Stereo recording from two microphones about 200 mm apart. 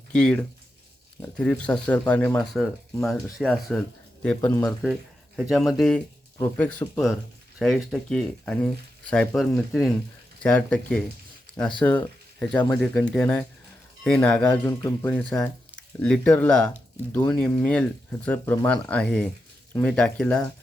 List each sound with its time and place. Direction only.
0.1 s speech: 5° left (ahead or behind)
4.4 s speech: 15° left (ahead or behind)
5.4 s speech: centre (ahead or behind)